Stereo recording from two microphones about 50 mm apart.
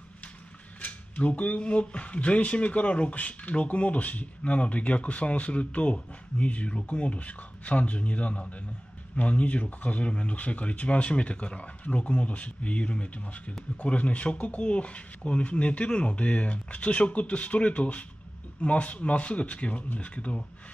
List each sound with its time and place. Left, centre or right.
0.7 s speech: left